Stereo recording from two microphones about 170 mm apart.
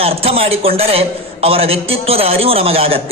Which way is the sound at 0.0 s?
35° right (ahead or behind).